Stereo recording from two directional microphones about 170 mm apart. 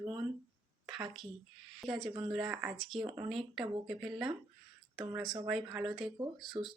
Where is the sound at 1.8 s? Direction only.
Centre (ahead or behind).